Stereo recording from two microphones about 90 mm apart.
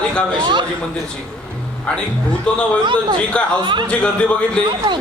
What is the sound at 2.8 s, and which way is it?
Speech, 60° right (ahead or behind).